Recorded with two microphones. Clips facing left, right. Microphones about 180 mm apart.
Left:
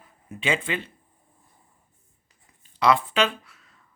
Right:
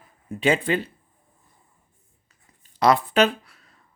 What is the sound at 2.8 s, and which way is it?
Speech, 40° right (ahead or behind).